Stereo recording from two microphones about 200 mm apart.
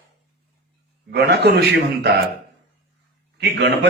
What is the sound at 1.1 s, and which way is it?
Speech, 55° right (ahead or behind).